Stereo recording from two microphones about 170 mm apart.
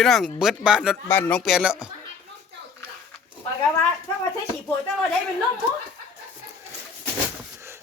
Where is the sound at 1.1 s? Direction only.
10° left (ahead or behind).